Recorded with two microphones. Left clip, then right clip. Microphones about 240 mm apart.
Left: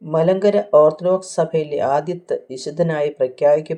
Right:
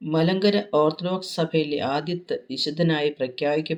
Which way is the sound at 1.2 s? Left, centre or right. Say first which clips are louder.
Left 5 dB; left.